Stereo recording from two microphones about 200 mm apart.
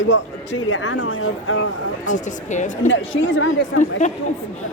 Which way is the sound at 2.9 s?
70° left (ahead or behind).